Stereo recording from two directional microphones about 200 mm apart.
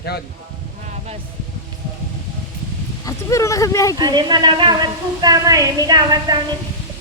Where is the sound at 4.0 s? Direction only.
20° right (ahead or behind).